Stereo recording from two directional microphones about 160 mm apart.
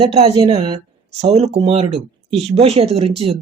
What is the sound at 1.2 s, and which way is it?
Speech, 40° right (ahead or behind).